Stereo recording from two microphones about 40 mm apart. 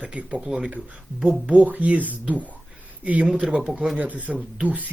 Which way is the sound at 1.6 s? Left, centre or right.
Right.